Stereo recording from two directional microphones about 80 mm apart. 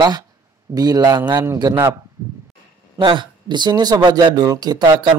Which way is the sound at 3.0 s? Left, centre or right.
Right.